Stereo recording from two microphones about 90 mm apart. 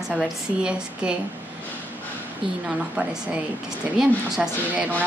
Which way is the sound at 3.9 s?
10° right (ahead or behind).